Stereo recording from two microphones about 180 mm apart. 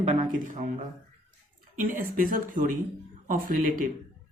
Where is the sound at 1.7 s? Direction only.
50° right (ahead or behind).